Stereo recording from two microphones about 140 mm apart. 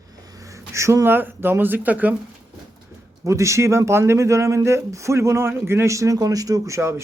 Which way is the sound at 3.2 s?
20° right (ahead or behind).